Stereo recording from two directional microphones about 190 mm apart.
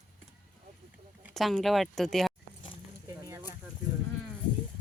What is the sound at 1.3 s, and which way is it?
Speech, centre (ahead or behind).